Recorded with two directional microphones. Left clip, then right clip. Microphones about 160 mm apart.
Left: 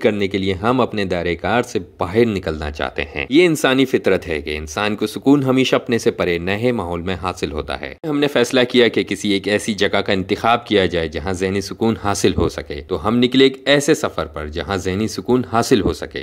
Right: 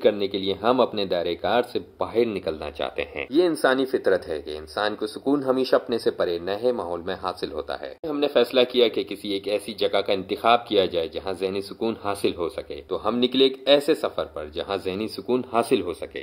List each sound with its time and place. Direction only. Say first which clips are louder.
0.0 s speech: left 4 dB; 30° left (ahead or behind)